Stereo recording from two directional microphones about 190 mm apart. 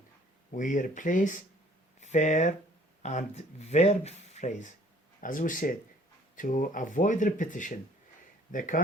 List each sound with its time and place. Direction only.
0.5 s speech: 45° left (ahead or behind)